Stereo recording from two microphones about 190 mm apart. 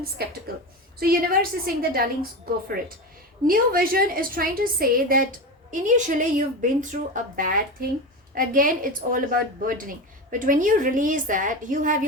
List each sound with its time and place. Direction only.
0.2 s a woman's voice: 55° right (ahead or behind)
3.4 s speech: 50° right (ahead or behind)